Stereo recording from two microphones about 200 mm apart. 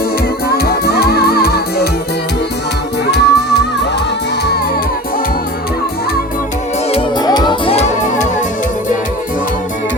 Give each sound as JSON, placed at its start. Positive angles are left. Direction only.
{"t": 0.4, "sound": "music", "side_deg": 50}
{"t": 3.1, "sound": "music", "side_deg": 55}
{"t": 6.9, "sound": "music", "side_deg": 20}